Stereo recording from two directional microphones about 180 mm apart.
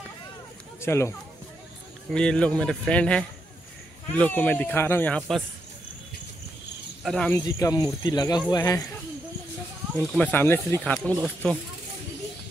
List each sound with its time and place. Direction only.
0.7 s speech: 15° left (ahead or behind)
2.0 s speech: 5° left (ahead or behind)
7.0 s speech: 5° left (ahead or behind)
7.3 s speech: 20° left (ahead or behind)
9.9 s speech: 5° left (ahead or behind)